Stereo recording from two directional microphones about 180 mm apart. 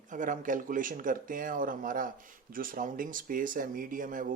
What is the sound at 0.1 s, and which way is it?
Speech, 45° right (ahead or behind).